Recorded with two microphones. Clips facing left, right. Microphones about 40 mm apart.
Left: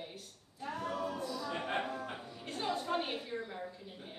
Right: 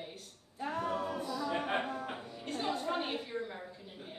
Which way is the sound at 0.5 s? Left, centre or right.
Right.